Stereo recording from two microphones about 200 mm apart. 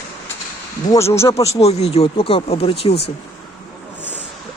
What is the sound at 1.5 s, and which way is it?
Speech, 30° left (ahead or behind).